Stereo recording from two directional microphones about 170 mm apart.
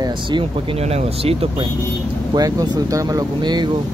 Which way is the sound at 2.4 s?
20° right (ahead or behind).